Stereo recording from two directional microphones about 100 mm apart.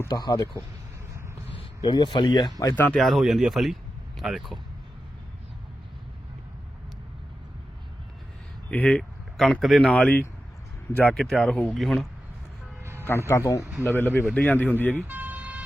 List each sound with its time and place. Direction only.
0.1 s speech: 40° left (ahead or behind)
1.8 s speech: 50° left (ahead or behind)
2.7 s speech: 20° left (ahead or behind)
3.0 s speech: centre (ahead or behind)
8.7 s speech: 15° left (ahead or behind)
9.6 s speech: centre (ahead or behind)
9.8 s speech: 10° left (ahead or behind)
11.8 s speech: centre (ahead or behind)
12.8 s music: 25° right (ahead or behind)
13.1 s speech: 25° left (ahead or behind)
15.0 s vehicle: 15° right (ahead or behind)